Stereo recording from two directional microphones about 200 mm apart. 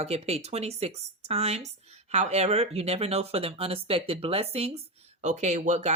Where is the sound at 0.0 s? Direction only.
30° right (ahead or behind).